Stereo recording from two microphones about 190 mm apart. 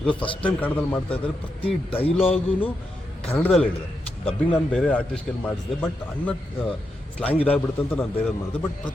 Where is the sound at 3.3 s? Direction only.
10° left (ahead or behind).